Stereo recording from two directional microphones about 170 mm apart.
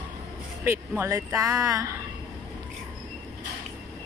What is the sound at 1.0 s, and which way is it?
Speech, 15° right (ahead or behind).